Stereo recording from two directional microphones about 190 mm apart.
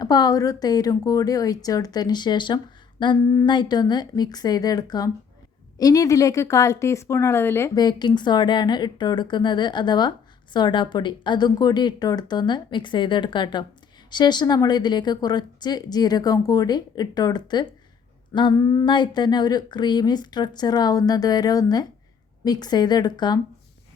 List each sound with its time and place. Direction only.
0.0 s speech: 20° left (ahead or behind)